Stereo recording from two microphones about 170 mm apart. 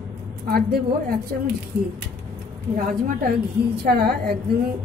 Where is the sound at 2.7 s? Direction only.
55° right (ahead or behind).